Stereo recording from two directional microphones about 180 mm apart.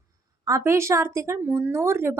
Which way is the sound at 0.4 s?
15° right (ahead or behind).